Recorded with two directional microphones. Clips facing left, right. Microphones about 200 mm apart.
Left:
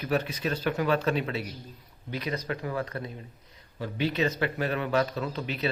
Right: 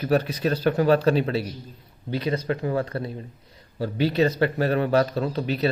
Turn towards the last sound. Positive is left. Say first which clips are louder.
# right 7 dB
turn(degrees=-40)  # may be behind; listen again after turning